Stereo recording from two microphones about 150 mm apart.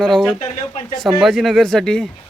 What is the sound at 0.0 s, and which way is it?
Speech, 5° left (ahead or behind).